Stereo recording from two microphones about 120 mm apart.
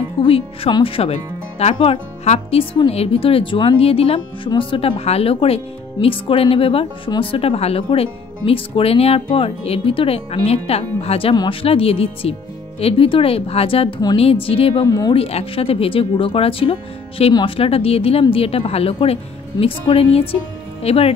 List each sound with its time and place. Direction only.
0.2 s speech: 40° left (ahead or behind)
14.9 s speech: 30° left (ahead or behind)
15.1 s speech: 55° left (ahead or behind)
17.2 s speech: 60° left (ahead or behind)